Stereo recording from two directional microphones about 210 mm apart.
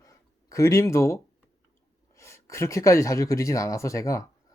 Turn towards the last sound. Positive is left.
turn(degrees=15)  # may be behind; listen again after turning